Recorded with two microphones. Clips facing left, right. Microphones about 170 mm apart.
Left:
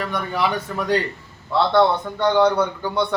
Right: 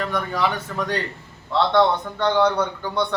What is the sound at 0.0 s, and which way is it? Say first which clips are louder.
Speech: even; 10° left (ahead or behind).